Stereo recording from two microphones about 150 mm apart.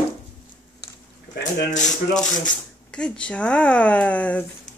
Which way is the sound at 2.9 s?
5° left (ahead or behind).